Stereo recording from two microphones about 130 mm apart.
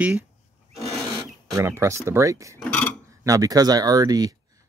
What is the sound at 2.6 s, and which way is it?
Speech, 10° left (ahead or behind).